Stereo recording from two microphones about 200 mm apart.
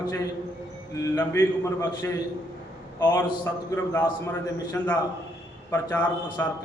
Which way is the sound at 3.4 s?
10° left (ahead or behind).